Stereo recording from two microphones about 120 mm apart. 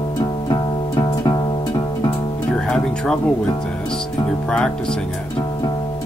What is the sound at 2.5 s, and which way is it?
Music, 5° left (ahead or behind).